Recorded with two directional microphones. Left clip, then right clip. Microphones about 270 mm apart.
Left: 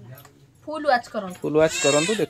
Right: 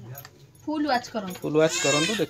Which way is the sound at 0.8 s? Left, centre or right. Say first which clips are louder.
Left 7 dB; centre.